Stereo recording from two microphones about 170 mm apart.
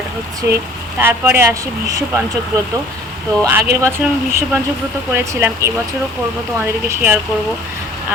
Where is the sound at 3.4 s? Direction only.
15° right (ahead or behind).